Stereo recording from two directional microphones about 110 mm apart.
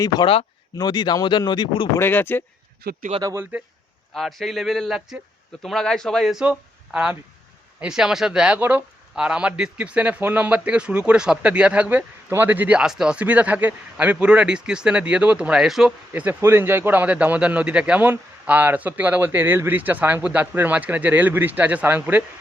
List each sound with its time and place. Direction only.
0.3 s speech: 50° left (ahead or behind)
2.0 s speech: 20° left (ahead or behind)
3.5 s speech: 15° right (ahead or behind)
4.1 s speech: centre (ahead or behind)
6.4 s speech: 10° right (ahead or behind)
16.2 s speech: 25° right (ahead or behind)